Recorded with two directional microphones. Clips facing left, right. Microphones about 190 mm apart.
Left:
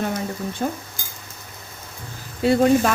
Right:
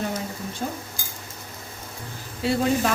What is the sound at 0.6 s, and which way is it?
Dishes, 55° left (ahead or behind).